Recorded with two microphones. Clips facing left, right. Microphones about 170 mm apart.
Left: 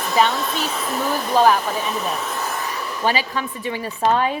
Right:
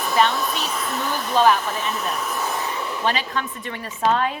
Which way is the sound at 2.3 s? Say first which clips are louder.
Even; 15° right (ahead or behind).